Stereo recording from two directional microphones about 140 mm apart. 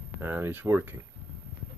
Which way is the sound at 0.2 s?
15° right (ahead or behind).